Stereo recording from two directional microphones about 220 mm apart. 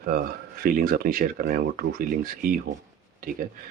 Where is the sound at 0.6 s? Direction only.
40° right (ahead or behind).